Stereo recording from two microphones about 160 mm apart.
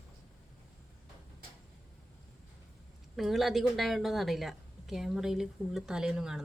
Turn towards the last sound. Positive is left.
turn(degrees=-5)  # may be behind; listen again after turning